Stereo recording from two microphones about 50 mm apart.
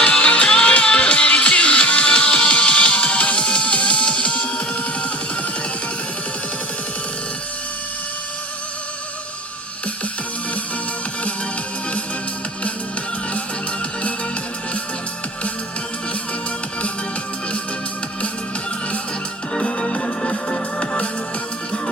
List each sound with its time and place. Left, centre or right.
0.0 s music: left
19.5 s music: left